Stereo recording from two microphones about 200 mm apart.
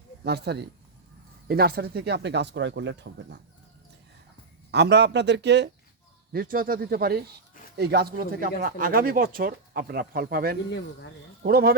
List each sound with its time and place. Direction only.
0.3 s speech: 55° right (ahead or behind)
4.7 s speech: 60° right (ahead or behind)
6.3 s speech: 50° right (ahead or behind)
10.7 s speech: 60° left (ahead or behind)
11.4 s speech: 50° right (ahead or behind)